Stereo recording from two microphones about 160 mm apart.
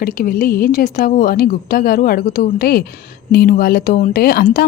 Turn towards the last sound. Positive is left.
turn(degrees=70)  # may be behind; listen again after turning